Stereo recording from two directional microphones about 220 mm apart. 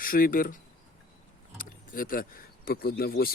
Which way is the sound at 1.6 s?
40° left (ahead or behind).